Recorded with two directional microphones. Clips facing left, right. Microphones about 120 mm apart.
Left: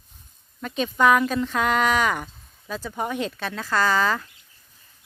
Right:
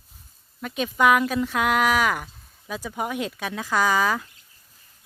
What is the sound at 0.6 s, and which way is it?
Speech, 5° right (ahead or behind).